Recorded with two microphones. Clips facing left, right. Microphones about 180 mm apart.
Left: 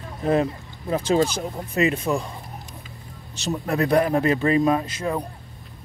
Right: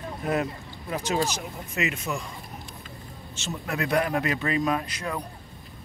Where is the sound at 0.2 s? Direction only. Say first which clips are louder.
Left 7 dB; 30° left (ahead or behind).